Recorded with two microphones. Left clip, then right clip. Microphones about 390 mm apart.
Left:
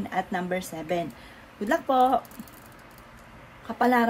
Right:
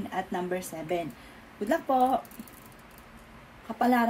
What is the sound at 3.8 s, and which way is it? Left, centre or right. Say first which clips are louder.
Speech: left 3 dB; left.